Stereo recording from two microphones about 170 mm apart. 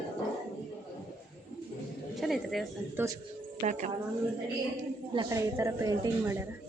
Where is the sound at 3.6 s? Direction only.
45° right (ahead or behind).